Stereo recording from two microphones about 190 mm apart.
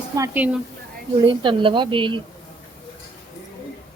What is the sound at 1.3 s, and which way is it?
Speech, 25° right (ahead or behind).